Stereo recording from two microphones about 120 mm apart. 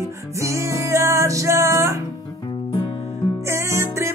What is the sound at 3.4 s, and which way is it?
Music, 25° right (ahead or behind).